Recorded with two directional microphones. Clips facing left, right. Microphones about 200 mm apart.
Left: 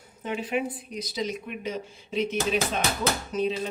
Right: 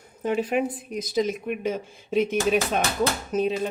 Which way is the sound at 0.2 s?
45° right (ahead or behind).